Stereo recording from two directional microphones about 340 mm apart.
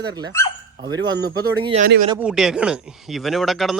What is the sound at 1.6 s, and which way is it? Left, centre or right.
Speech, centre.